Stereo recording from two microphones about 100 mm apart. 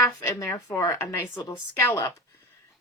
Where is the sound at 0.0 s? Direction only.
30° left (ahead or behind).